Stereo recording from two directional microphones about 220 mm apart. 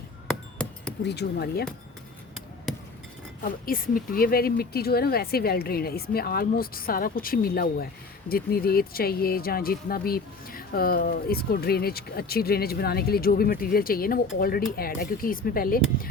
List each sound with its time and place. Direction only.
0.3 s a sound: 5° left (ahead or behind)
1.0 s speech: 50° left (ahead or behind)
3.4 s speech: 40° left (ahead or behind)